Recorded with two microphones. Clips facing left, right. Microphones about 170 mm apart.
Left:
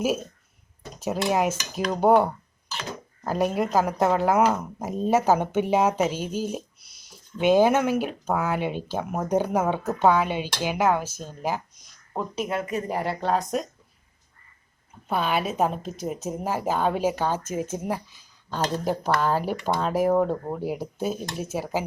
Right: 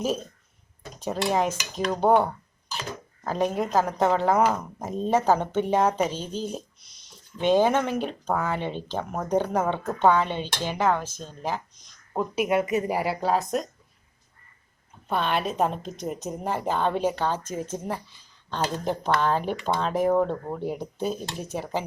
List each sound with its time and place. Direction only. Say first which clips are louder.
0.0 s a woman's voice: left 2 dB; 10° left (ahead or behind)
0.9 s dishes: left 1 dB; 5° left (ahead or behind)
3.2 s a woman's voice: left 1 dB; 10° left (ahead or behind)
12.1 s a woman's voice: right 4 dB; 10° right (ahead or behind)
15.0 s a woman's voice: left 1 dB; 5° left (ahead or behind)